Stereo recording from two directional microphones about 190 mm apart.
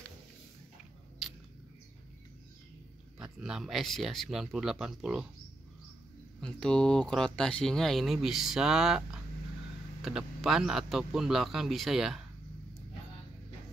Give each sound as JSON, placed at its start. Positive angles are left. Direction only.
{"t": 3.2, "sound": "speech", "side_deg": -5}
{"t": 6.4, "sound": "speech", "side_deg": 5}